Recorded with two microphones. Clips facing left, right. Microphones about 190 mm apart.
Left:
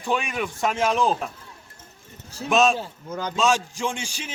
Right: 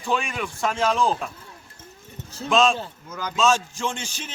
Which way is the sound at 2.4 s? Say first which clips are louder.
Even; 20° left (ahead or behind).